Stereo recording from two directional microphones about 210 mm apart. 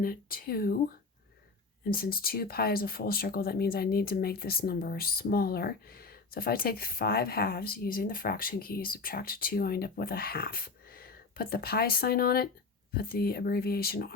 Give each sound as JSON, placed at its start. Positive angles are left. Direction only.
{"t": 0.0, "sound": "speech", "side_deg": 45}